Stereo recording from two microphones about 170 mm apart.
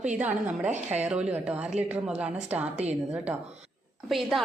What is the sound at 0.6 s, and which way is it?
Speech, 40° right (ahead or behind).